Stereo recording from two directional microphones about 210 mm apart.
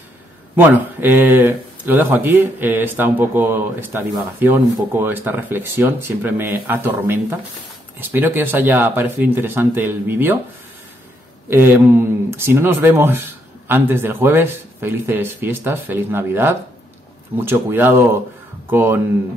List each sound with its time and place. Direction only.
0.6 s speech: 10° right (ahead or behind)
11.5 s speech: 10° right (ahead or behind)